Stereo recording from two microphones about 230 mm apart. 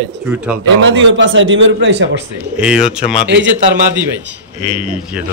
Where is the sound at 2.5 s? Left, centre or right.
Centre.